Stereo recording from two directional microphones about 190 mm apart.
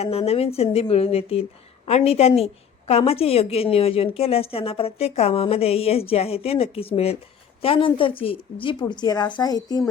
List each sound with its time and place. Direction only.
0.0 s a woman's voice: 30° left (ahead or behind)